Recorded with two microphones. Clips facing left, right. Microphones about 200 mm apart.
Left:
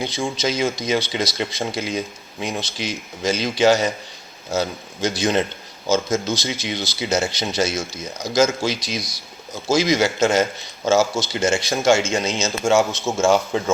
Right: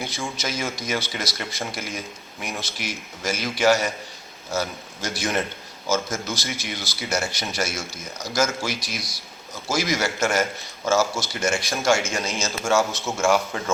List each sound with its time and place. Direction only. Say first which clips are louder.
0.0 s speech: left 7 dB; 20° left (ahead or behind)